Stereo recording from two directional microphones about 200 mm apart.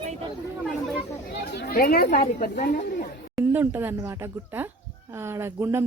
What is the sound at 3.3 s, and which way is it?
A woman's voice, 10° right (ahead or behind).